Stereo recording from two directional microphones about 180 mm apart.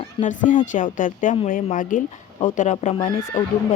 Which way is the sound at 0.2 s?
45° left (ahead or behind).